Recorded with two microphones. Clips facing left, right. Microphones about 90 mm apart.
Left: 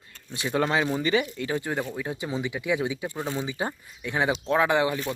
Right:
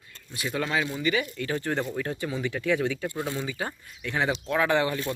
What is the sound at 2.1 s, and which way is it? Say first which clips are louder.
Speech: even; 20° left (ahead or behind).